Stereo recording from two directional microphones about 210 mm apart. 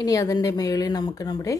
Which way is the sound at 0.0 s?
15° left (ahead or behind).